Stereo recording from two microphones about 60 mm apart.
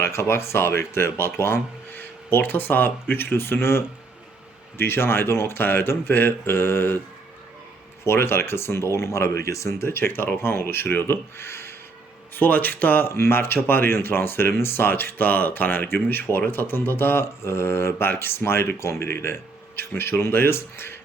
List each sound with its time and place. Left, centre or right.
0.0 s speech: left
8.0 s speech: left
12.3 s speech: left
13.1 s speech: left